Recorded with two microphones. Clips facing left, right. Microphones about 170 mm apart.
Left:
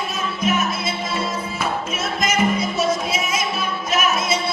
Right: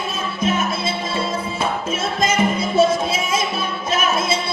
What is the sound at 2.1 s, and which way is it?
Music, 30° right (ahead or behind).